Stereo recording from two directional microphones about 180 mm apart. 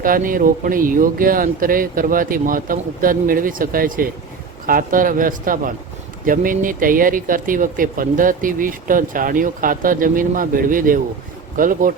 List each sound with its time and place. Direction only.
0.0 s speech: 50° right (ahead or behind)